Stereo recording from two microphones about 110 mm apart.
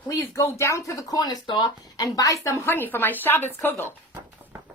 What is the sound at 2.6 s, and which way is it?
A woman's voice, 20° left (ahead or behind).